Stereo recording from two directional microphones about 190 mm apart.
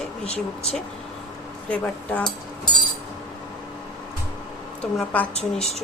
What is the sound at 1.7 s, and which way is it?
Speech, 5° left (ahead or behind).